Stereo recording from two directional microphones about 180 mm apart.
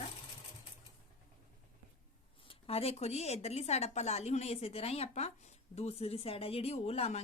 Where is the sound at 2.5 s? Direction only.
35° left (ahead or behind).